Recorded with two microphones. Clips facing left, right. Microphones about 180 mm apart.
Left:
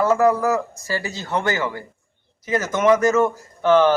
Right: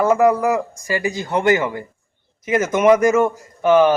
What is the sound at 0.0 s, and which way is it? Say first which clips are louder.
Speech: right 2 dB; 15° right (ahead or behind).